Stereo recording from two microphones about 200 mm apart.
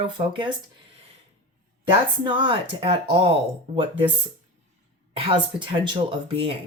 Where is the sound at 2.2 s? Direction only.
25° right (ahead or behind).